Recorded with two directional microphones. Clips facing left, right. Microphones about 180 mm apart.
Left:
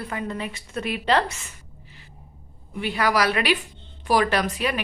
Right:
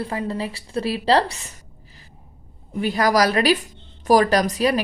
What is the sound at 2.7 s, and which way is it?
Speech, 40° right (ahead or behind).